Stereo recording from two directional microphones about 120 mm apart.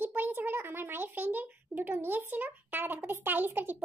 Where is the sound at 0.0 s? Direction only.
15° right (ahead or behind).